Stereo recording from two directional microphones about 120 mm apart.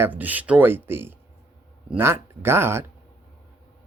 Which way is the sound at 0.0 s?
15° right (ahead or behind).